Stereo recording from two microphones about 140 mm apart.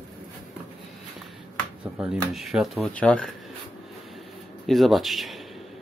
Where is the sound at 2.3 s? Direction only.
Centre (ahead or behind).